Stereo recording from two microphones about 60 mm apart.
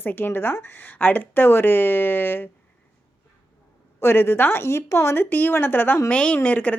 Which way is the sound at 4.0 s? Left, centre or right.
Left.